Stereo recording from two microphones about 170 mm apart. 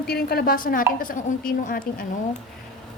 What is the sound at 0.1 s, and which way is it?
A woman's voice, 65° left (ahead or behind).